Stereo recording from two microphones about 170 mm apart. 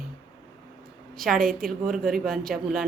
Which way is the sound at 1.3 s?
55° right (ahead or behind).